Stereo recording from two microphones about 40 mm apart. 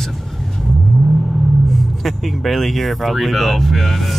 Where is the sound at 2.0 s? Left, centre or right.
Centre.